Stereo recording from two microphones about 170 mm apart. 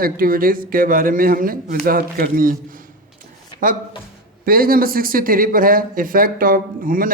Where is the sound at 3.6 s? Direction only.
55° right (ahead or behind).